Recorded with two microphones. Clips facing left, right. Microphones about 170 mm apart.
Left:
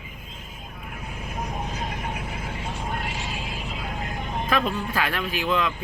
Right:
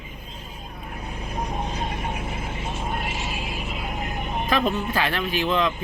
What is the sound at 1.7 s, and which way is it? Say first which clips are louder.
Vehicle: right 2 dB; 30° right (ahead or behind).